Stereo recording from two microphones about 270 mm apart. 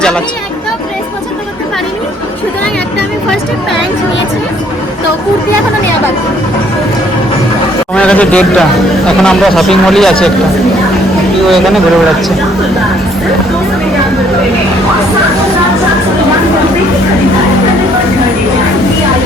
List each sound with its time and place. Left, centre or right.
7.9 s speech: centre
11.4 s speech: centre